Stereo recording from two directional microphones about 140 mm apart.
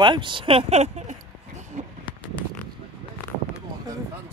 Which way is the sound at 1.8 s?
60° right (ahead or behind).